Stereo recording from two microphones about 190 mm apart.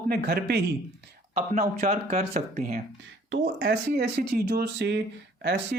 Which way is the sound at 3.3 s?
55° right (ahead or behind).